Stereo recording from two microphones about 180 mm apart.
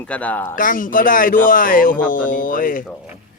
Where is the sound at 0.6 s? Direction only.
50° left (ahead or behind).